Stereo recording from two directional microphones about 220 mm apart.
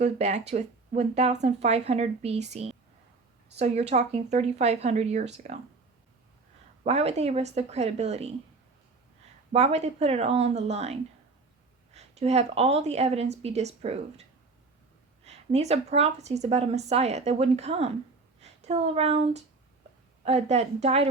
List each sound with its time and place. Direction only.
0.0 s speech: 30° right (ahead or behind)
6.8 s speech: 30° right (ahead or behind)
9.5 s speech: 30° right (ahead or behind)
11.9 s speech: 30° right (ahead or behind)